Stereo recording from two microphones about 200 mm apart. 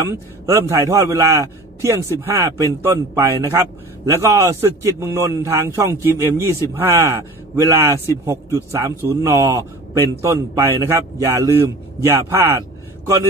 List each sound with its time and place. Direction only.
0.1 s a man's voice: 15° right (ahead or behind)